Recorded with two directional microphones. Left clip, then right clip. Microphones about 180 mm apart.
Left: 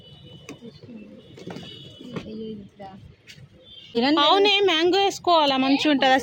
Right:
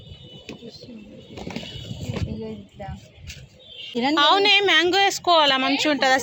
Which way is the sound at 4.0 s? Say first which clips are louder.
Even; 35° left (ahead or behind).